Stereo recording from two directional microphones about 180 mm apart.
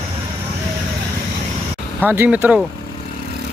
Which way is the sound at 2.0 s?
10° right (ahead or behind).